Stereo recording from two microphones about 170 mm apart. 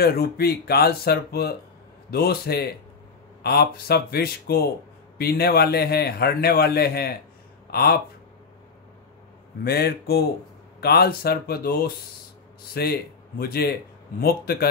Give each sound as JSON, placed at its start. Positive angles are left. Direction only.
{"t": 0.0, "sound": "a man's voice", "side_deg": 65}
{"t": 9.7, "sound": "a man's voice", "side_deg": 70}